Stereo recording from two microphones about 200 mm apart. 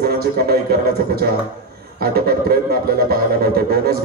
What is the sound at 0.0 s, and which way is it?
Speech, 50° right (ahead or behind).